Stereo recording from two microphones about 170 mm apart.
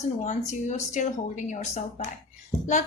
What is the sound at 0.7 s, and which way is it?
A woman's voice, 45° left (ahead or behind).